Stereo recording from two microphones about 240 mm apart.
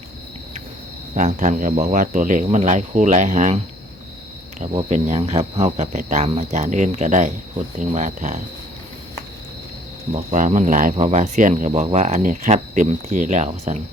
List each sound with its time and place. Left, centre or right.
1.1 s speech: right
4.7 s speech: right
10.1 s speech: right